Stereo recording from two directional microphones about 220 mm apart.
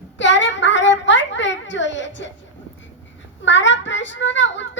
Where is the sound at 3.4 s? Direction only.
55° left (ahead or behind).